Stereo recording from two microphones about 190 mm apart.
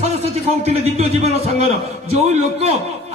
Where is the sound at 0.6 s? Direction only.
35° right (ahead or behind).